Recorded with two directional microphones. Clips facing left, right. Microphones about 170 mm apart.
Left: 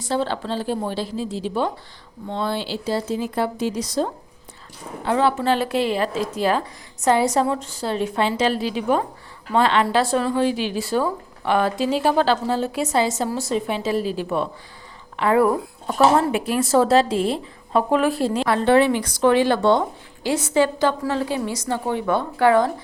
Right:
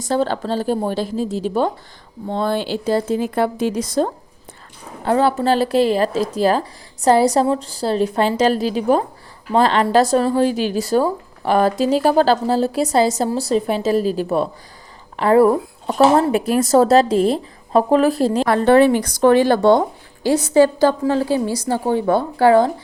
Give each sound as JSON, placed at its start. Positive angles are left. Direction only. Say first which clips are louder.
{"t": 0.0, "sound": "speech", "louder": "right 4 dB", "side_deg": -45}
{"t": 5.0, "sound": "a woman's voice", "louder": "right 3 dB", "side_deg": -40}